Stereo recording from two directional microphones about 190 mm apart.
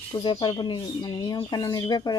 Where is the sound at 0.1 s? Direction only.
25° left (ahead or behind).